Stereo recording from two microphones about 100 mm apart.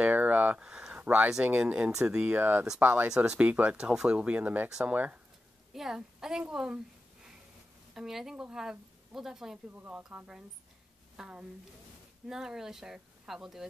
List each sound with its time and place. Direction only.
0.0 s speech: 15° right (ahead or behind)
4.9 s speech: 15° right (ahead or behind)
5.7 s a woman's voice: 5° right (ahead or behind)
7.9 s speech: 5° right (ahead or behind)
9.7 s speech: 20° right (ahead or behind)